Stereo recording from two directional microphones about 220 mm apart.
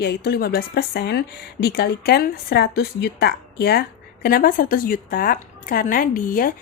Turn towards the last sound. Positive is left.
turn(degrees=40)  # may be behind; listen again after turning